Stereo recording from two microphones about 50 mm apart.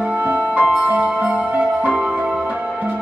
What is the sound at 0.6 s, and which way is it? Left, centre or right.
Music, right.